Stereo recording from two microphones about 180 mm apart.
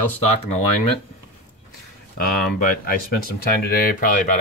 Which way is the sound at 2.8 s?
55° left (ahead or behind).